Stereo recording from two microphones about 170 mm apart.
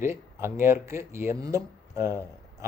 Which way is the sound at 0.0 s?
15° right (ahead or behind).